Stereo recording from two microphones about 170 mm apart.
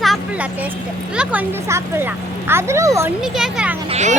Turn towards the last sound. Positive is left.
turn(degrees=-45)  # may be behind; listen again after turning